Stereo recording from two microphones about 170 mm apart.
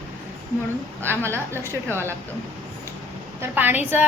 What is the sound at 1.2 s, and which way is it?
Speech, 15° right (ahead or behind).